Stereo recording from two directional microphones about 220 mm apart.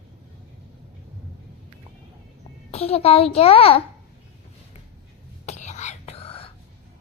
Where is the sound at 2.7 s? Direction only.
30° left (ahead or behind).